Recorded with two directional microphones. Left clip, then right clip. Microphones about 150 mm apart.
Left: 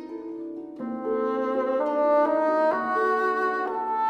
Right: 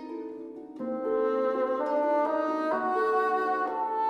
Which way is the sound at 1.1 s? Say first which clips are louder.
Left 1 dB; 45° left (ahead or behind).